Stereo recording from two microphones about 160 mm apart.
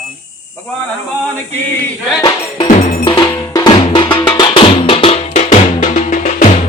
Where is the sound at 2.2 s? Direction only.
25° left (ahead or behind).